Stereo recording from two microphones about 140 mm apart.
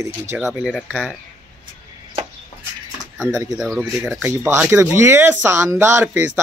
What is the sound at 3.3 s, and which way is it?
Speech, 25° right (ahead or behind).